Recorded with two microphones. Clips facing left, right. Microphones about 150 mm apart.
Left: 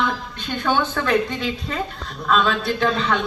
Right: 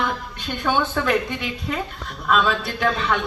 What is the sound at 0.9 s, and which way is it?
Speech, 15° right (ahead or behind).